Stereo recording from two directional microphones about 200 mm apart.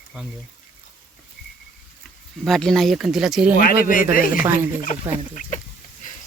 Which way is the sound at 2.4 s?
Centre (ahead or behind).